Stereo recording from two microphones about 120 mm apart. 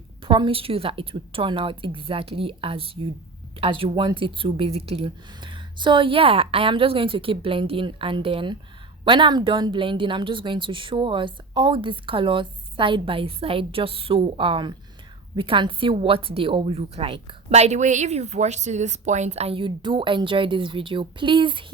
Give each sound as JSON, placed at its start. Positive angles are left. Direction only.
{"t": 0.3, "sound": "speech", "side_deg": -45}
{"t": 17.5, "sound": "a woman's voice", "side_deg": -70}
{"t": 19.5, "sound": "speech", "side_deg": -40}